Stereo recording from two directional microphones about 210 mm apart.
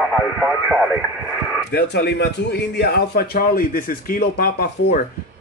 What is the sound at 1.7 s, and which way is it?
A man's voice, 50° left (ahead or behind).